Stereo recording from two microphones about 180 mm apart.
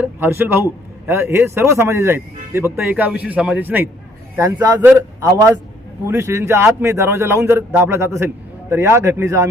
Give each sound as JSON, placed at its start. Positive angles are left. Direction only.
{"t": 0.0, "sound": "a man's voice", "side_deg": -10}